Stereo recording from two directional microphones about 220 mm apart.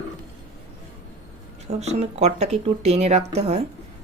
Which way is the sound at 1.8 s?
30° right (ahead or behind).